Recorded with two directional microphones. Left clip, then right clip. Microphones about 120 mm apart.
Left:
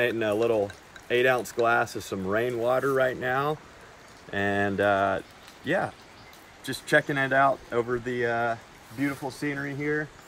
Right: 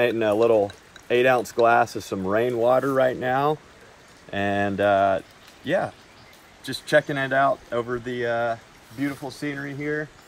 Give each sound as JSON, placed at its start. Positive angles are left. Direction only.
{"t": 0.0, "sound": "speech", "side_deg": -25}
{"t": 6.6, "sound": "speech", "side_deg": -20}
{"t": 9.1, "sound": "speech", "side_deg": 0}